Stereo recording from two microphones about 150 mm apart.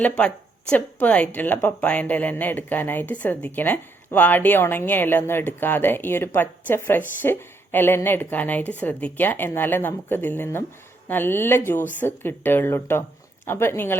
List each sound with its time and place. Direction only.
0.0 s a woman's voice: 5° left (ahead or behind)